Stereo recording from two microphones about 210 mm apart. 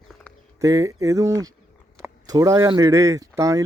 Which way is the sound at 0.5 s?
15° right (ahead or behind).